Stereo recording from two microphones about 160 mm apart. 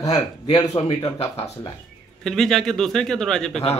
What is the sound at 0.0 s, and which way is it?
Speech, 25° left (ahead or behind).